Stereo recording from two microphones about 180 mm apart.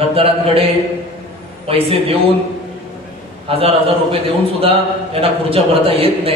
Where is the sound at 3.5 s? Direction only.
30° right (ahead or behind).